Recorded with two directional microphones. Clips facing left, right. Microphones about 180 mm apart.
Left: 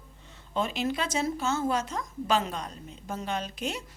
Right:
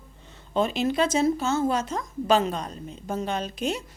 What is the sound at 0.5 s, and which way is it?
A woman's voice, 30° right (ahead or behind).